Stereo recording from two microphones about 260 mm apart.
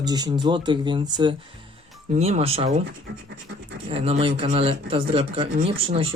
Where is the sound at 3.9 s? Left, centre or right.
Right.